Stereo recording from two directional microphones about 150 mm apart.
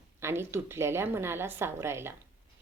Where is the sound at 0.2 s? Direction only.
15° right (ahead or behind).